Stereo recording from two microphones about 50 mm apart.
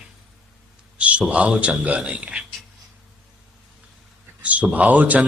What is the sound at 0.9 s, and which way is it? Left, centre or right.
A man's voice, right.